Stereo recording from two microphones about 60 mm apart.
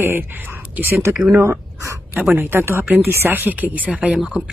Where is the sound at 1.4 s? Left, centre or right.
Right.